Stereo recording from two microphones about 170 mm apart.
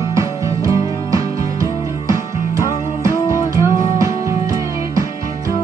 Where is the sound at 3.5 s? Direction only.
20° right (ahead or behind).